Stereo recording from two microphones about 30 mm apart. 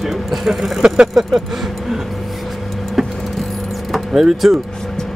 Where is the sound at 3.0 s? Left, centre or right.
Centre.